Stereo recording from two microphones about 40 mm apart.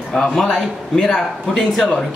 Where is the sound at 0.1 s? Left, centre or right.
Centre.